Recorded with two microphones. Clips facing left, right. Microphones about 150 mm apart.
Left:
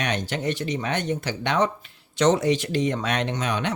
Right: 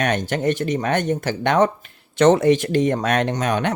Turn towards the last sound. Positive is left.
turn(degrees=-50)  # may be behind; listen again after turning